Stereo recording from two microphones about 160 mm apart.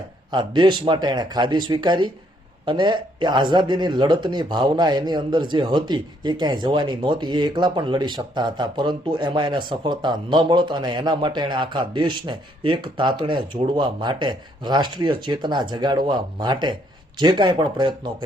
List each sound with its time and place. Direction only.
0.3 s speech: 30° right (ahead or behind)